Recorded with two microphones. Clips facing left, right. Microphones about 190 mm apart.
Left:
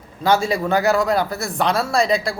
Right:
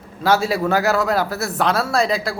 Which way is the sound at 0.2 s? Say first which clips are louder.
Even; 5° right (ahead or behind).